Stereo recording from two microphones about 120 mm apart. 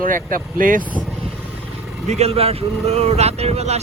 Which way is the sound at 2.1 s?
60° right (ahead or behind).